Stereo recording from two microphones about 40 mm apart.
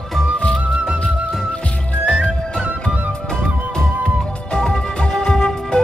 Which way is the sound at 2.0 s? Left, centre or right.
Left.